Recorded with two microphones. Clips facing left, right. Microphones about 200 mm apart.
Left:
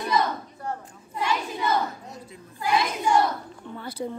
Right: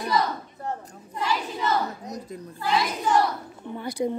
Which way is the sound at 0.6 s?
20° right (ahead or behind).